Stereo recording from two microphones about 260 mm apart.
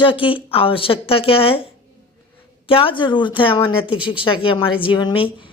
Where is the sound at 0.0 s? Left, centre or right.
Centre.